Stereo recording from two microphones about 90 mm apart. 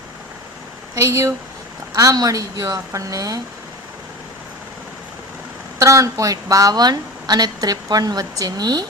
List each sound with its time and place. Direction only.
0.9 s a woman's voice: 35° right (ahead or behind)
5.8 s a woman's voice: 35° right (ahead or behind)